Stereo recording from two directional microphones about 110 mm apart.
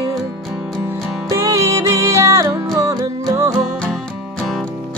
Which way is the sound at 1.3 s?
25° right (ahead or behind).